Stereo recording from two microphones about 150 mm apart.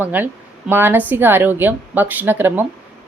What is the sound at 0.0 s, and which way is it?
Speech, 10° right (ahead or behind).